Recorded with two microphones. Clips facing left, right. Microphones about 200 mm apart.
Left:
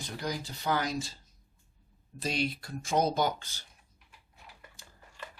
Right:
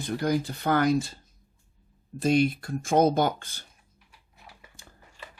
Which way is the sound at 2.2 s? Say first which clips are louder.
Right 10 dB; 50° right (ahead or behind).